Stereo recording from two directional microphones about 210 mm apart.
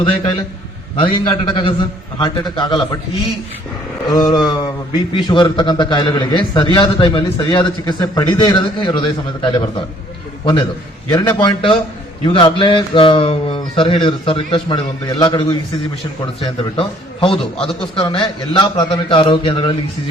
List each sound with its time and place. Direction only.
0.0 s a man's voice: 25° left (ahead or behind)
4.1 s a sound: 20° left (ahead or behind)
5.1 s a man's voice: 20° left (ahead or behind)
11.1 s a man's voice: 15° left (ahead or behind)